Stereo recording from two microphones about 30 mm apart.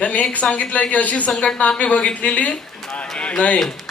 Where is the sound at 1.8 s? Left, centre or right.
Left.